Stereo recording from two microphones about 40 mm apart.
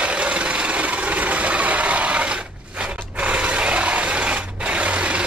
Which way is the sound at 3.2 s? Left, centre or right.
Right.